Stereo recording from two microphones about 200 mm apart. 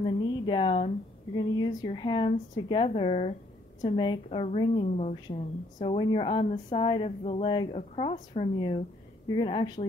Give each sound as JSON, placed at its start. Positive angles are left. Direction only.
{"t": 0.0, "sound": "a woman's voice", "side_deg": 25}
{"t": 6.4, "sound": "a woman's voice", "side_deg": 35}